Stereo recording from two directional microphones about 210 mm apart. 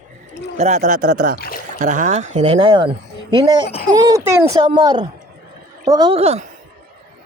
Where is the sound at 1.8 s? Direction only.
35° right (ahead or behind).